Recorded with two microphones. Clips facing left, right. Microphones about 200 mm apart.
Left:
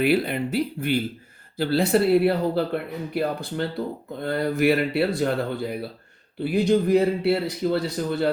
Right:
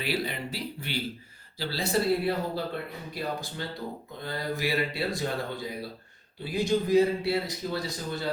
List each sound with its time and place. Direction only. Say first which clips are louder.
0.0 s speech: left 10 dB; 55° left (ahead or behind)